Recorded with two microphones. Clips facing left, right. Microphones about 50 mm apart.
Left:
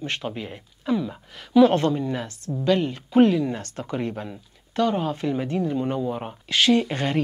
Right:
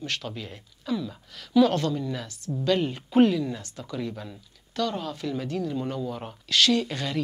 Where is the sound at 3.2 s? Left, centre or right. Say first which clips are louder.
Left 3 dB; left.